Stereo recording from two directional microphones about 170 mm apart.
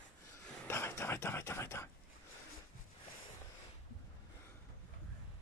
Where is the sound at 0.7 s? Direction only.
15° left (ahead or behind).